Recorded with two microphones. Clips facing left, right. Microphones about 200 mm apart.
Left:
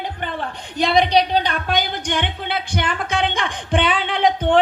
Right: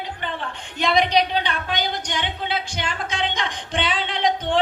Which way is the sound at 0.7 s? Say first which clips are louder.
Left 3 dB; 35° left (ahead or behind).